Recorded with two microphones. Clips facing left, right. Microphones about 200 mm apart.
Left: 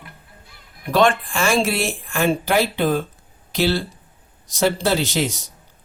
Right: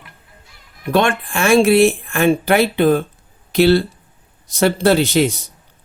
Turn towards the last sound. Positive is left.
turn(degrees=-60)  # may be behind; listen again after turning